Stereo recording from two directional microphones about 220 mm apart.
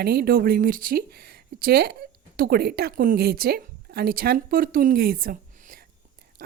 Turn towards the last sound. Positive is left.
turn(degrees=-40)  # may be behind; listen again after turning